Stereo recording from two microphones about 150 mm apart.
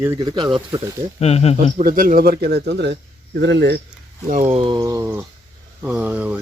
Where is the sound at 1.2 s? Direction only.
45° left (ahead or behind).